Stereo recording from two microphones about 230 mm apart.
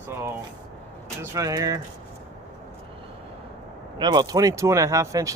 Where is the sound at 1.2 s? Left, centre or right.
Centre.